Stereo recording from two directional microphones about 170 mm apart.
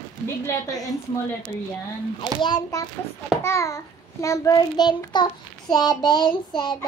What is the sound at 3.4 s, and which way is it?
Child singing, 20° left (ahead or behind).